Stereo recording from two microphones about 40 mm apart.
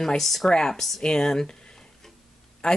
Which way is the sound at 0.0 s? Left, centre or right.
Centre.